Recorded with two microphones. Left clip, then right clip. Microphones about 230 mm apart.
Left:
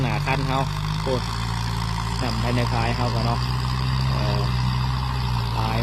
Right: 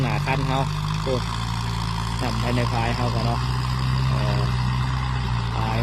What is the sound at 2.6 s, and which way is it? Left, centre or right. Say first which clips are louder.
Speech: even; centre.